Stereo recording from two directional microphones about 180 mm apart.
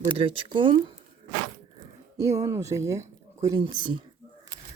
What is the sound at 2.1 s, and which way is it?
Speech, 20° right (ahead or behind).